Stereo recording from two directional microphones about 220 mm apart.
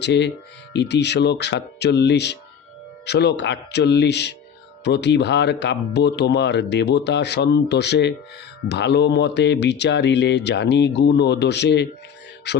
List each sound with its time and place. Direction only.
0.0 s speech: 50° left (ahead or behind)